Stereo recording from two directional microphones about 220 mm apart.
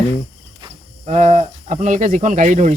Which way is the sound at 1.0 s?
30° right (ahead or behind).